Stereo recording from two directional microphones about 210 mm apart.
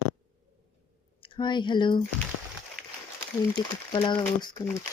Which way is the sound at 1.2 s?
20° left (ahead or behind).